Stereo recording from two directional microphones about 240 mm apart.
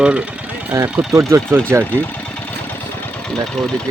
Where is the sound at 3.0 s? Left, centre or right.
Centre.